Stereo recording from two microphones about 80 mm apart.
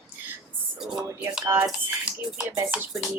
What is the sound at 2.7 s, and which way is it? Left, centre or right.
Speech, centre.